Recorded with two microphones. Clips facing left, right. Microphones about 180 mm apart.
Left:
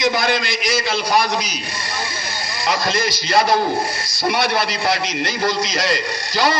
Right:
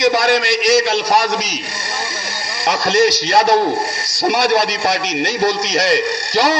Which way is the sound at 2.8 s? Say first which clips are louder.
Right 7 dB; 75° right (ahead or behind).